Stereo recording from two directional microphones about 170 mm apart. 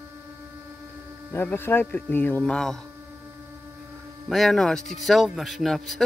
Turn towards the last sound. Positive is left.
turn(degrees=0)  # may be behind; listen again after turning